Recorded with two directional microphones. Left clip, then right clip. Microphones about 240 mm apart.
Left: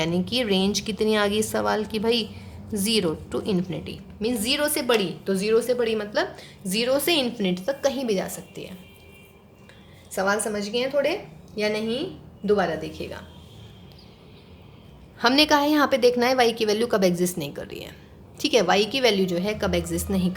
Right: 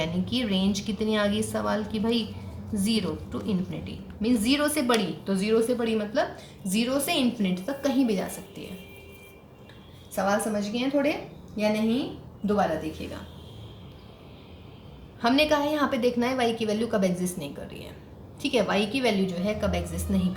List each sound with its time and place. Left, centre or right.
0.0 s a woman's voice: left
10.2 s a woman's voice: left
15.2 s a woman's voice: left